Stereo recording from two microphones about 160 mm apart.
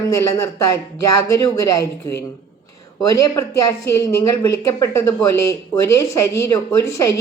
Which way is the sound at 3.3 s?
20° left (ahead or behind).